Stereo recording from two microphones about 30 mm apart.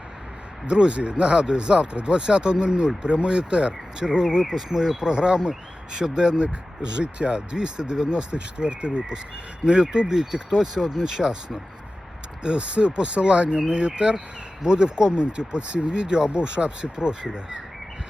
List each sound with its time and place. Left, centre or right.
0.7 s speech: right
4.5 s speech: centre
4.9 s speech: right
12.4 s speech: right